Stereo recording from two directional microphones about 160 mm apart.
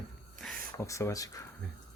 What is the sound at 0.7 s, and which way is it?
Speech, 20° left (ahead or behind).